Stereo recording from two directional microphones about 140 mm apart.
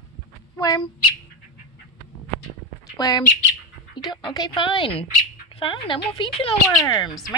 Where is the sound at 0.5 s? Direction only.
30° left (ahead or behind).